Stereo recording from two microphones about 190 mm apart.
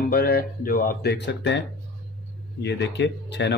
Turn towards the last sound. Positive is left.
turn(degrees=65)  # may be behind; listen again after turning